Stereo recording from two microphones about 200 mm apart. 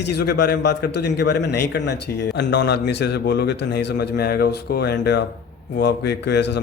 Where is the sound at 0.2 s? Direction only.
50° left (ahead or behind).